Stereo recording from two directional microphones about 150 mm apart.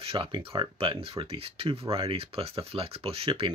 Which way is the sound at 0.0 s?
35° right (ahead or behind).